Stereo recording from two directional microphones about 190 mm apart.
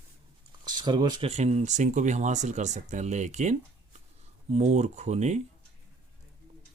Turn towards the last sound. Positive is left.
turn(degrees=-35)  # may be behind; listen again after turning